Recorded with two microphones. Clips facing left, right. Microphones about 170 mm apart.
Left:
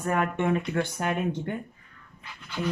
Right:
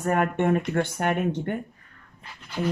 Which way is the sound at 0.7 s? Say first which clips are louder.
Right 3 dB; 60° right (ahead or behind).